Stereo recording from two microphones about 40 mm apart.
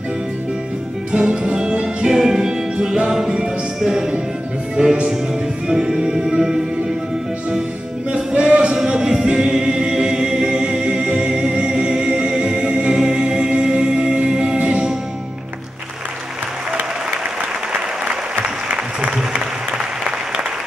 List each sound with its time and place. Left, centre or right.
1.1 s music: right
4.8 s speech: right
5.7 s music: centre
8.1 s music: right
8.7 s a capella: centre
11.1 s music: centre
14.6 s music: right
18.9 s applause: right